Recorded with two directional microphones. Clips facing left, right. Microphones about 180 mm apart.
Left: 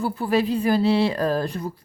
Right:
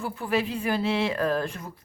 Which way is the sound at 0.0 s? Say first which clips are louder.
Left 5 dB; 35° left (ahead or behind).